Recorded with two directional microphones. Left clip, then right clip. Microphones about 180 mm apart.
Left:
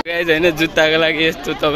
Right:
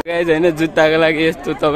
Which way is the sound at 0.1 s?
15° right (ahead or behind).